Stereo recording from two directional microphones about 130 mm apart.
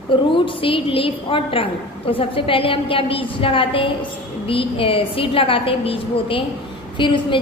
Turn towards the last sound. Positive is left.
turn(degrees=40)  # may be behind; listen again after turning